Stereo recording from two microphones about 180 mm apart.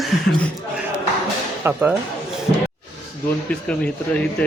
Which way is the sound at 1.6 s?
10° right (ahead or behind).